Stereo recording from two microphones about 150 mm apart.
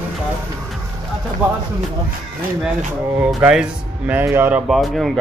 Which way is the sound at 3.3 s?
5° right (ahead or behind).